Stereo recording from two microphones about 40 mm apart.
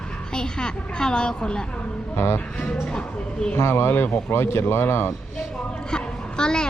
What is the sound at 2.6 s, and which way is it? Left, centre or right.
Speech, centre.